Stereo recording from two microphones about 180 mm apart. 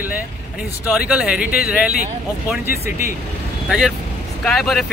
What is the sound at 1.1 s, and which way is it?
Speech, 5° right (ahead or behind).